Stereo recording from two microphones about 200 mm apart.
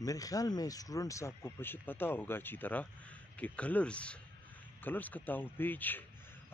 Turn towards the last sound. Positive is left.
turn(degrees=10)  # may be behind; listen again after turning